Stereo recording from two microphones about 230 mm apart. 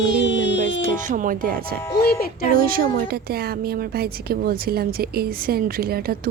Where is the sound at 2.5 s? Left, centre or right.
Right.